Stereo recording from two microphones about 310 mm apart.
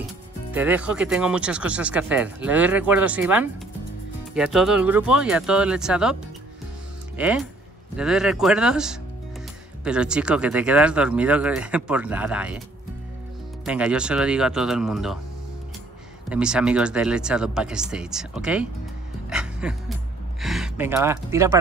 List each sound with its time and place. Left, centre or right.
0.5 s speech: centre
7.2 s speech: centre
13.7 s speech: centre
16.3 s speech: centre
19.2 s music: centre
20.3 s speech: centre